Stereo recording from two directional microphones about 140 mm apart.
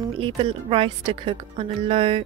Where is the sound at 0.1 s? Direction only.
40° right (ahead or behind).